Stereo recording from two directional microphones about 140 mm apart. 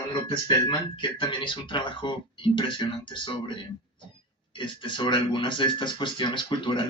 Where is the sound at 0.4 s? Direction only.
35° left (ahead or behind).